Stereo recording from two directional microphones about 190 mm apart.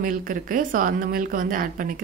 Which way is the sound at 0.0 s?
45° right (ahead or behind).